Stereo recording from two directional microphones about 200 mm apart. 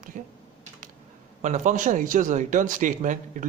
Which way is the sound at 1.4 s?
40° right (ahead or behind).